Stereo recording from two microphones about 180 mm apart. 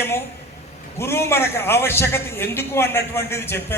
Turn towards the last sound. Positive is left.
turn(degrees=15)  # may be behind; listen again after turning